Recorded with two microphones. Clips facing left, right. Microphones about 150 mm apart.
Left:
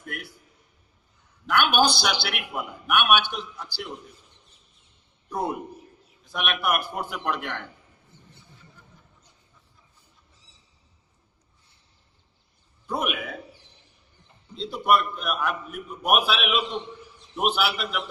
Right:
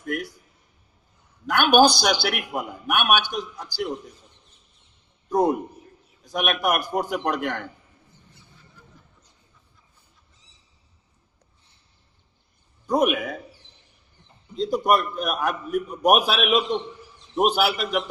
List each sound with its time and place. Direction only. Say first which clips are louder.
1.5 s a man's voice: right 5 dB; 40° right (ahead or behind)
5.3 s a man's voice: right 8 dB; 40° right (ahead or behind)
12.9 s a man's voice: right 8 dB; 40° right (ahead or behind)
14.5 s a man's voice: right 2 dB; 40° right (ahead or behind)